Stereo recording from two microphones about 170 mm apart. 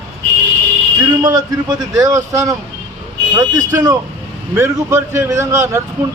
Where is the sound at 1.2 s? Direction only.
20° right (ahead or behind).